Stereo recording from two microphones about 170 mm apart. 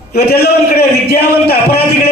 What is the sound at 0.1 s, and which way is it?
A man's voice, 70° left (ahead or behind).